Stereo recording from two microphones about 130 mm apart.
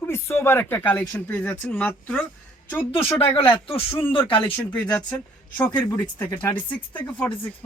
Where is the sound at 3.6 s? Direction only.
45° left (ahead or behind).